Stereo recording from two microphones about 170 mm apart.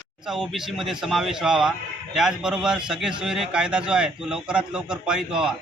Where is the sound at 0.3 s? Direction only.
Centre (ahead or behind).